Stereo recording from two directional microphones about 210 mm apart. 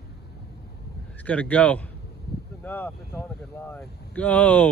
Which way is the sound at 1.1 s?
5° left (ahead or behind).